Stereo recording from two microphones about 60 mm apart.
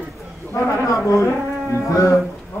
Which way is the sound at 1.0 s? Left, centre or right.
Left.